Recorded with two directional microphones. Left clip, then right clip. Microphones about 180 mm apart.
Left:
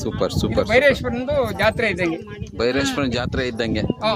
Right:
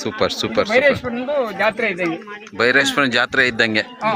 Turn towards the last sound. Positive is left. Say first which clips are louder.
# right 7 dB
turn(degrees=0)  # may be behind; listen again after turning